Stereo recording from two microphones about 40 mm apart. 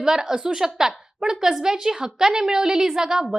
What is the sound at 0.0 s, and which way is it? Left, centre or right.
A woman's voice, centre.